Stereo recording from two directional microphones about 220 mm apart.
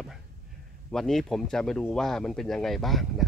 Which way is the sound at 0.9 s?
Centre (ahead or behind).